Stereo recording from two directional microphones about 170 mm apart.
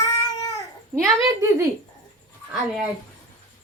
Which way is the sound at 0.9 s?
15° right (ahead or behind).